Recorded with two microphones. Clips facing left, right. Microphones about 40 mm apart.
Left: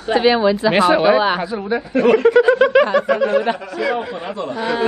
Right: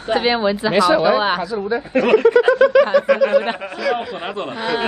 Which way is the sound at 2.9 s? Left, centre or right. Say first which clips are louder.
Right 1 dB; left.